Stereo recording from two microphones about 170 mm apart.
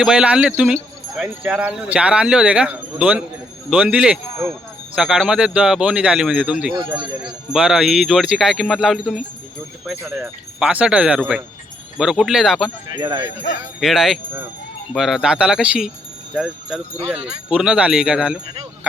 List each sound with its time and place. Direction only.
0.0 s speech: 5° right (ahead or behind)
10.1 s speech: 15° right (ahead or behind)
12.9 s speech: 25° right (ahead or behind)
13.7 s speech: 5° right (ahead or behind)